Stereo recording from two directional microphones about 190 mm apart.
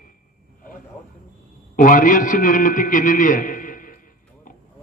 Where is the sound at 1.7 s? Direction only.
45° left (ahead or behind).